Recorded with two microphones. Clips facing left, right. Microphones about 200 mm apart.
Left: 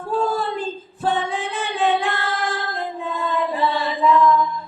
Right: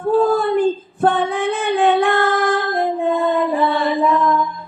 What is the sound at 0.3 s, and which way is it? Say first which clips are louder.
Female singing: right 9 dB; 55° right (ahead or behind).